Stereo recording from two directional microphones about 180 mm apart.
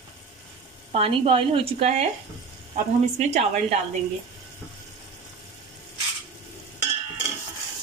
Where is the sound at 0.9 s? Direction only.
30° right (ahead or behind).